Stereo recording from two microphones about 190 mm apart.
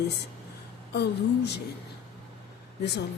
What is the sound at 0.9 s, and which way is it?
Speech, 60° left (ahead or behind).